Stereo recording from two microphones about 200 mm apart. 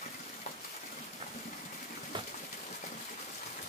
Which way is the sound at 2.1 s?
25° right (ahead or behind).